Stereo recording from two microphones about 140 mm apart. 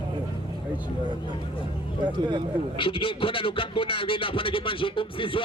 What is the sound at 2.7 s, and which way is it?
Speech, 40° left (ahead or behind).